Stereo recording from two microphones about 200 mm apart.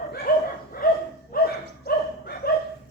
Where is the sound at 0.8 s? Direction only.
45° left (ahead or behind).